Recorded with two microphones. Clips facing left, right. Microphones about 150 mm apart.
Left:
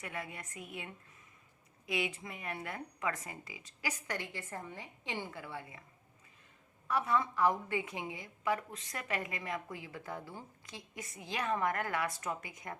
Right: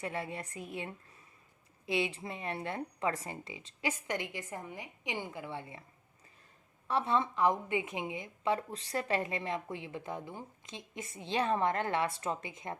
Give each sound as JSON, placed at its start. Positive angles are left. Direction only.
{"t": 0.0, "sound": "a woman's voice", "side_deg": -30}
{"t": 6.8, "sound": "a woman's voice", "side_deg": -30}